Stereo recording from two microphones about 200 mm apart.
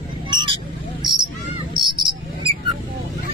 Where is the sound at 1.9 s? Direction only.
25° right (ahead or behind).